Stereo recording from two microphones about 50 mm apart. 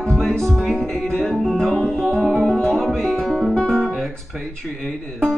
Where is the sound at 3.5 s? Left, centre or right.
Centre.